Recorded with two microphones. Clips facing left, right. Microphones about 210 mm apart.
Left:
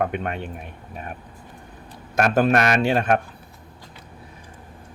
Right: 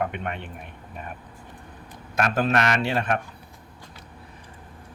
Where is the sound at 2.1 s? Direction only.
45° left (ahead or behind).